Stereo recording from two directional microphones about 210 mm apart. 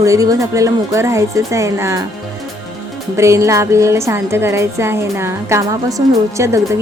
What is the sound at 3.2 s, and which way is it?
Speech, 15° right (ahead or behind).